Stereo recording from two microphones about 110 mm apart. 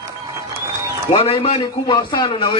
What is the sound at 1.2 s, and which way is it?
Speech, 60° left (ahead or behind).